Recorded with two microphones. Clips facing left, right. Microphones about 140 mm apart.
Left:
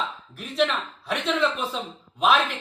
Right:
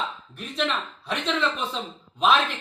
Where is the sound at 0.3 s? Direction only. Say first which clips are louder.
Left 4 dB; 5° left (ahead or behind).